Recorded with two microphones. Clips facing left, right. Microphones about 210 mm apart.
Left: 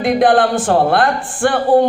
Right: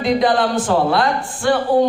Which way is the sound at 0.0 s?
55° left (ahead or behind).